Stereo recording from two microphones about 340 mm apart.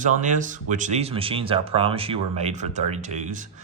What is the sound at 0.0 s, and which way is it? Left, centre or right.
Speech, right.